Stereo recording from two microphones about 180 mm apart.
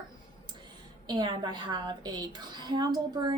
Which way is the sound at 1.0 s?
25° right (ahead or behind).